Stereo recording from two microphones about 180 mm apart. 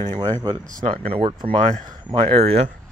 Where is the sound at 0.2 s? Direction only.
20° right (ahead or behind).